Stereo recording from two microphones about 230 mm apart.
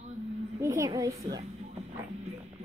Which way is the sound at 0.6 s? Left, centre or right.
Centre.